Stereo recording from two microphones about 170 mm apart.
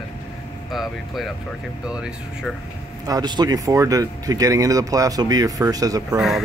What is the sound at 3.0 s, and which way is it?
Speech, 25° right (ahead or behind).